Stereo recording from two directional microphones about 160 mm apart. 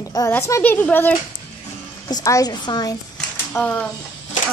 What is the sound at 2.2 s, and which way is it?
Speech, 20° left (ahead or behind).